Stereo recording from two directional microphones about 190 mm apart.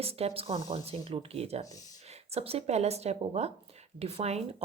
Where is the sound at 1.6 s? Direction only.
20° left (ahead or behind).